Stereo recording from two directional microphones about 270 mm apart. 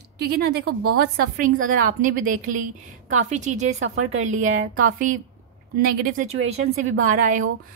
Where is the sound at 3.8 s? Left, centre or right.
Right.